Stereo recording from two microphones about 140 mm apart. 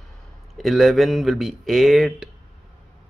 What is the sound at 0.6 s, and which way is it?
Speech, centre (ahead or behind).